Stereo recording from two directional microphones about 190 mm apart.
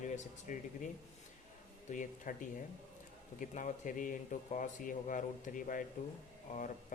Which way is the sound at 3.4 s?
40° left (ahead or behind).